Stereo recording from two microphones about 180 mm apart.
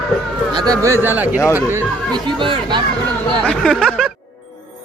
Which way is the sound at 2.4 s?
25° right (ahead or behind).